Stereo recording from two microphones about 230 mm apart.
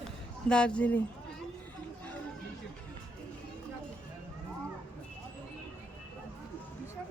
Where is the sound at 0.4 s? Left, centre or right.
Centre.